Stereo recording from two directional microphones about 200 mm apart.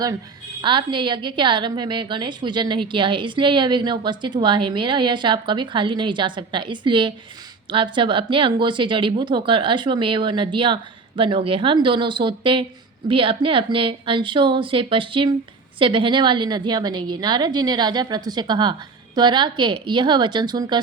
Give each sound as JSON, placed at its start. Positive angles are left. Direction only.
{"t": 0.6, "sound": "a woman's voice", "side_deg": -25}